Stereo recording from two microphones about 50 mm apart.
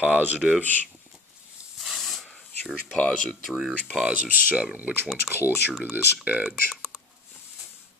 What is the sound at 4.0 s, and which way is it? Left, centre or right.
Speech, right.